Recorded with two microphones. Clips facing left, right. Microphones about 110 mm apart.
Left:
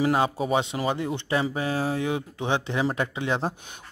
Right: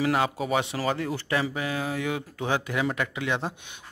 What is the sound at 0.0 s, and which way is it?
Speech, 25° left (ahead or behind).